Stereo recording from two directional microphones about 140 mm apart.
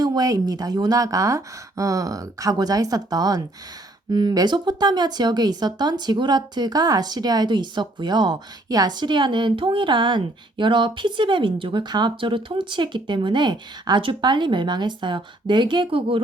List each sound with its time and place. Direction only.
0.0 s speech: 30° right (ahead or behind)